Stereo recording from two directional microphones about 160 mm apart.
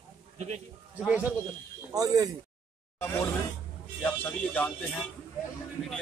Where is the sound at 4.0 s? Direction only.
10° left (ahead or behind).